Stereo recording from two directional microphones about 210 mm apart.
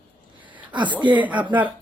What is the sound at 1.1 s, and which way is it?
Speech, 5° right (ahead or behind).